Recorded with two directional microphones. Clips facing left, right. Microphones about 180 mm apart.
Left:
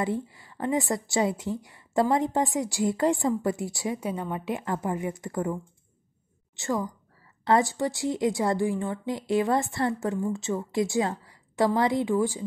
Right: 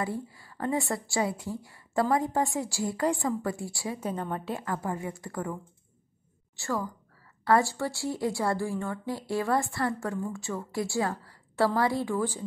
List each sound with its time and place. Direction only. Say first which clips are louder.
0.0 s a woman's voice: left 4 dB; 20° left (ahead or behind)